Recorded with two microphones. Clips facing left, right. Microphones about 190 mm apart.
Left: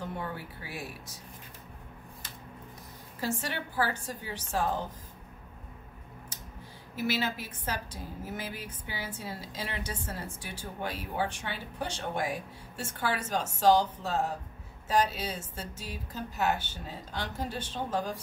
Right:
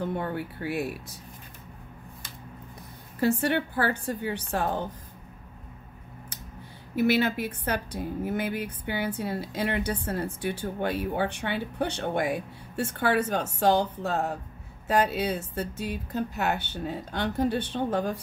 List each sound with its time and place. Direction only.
0.0 s speech: 60° right (ahead or behind)
3.2 s a woman's voice: 60° right (ahead or behind)
7.0 s a woman's voice: 60° right (ahead or behind)